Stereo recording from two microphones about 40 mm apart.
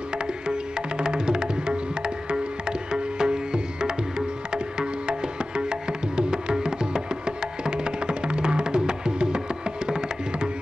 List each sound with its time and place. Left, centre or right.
0.5 s music: right
5.6 s music: right